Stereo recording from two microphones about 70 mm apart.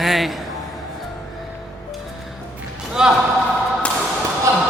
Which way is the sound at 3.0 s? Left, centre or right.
Centre.